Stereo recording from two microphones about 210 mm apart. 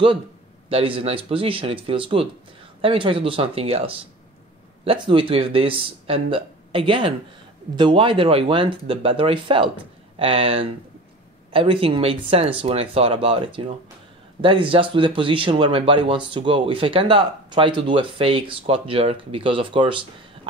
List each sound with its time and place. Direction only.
0.7 s speech: 25° right (ahead or behind)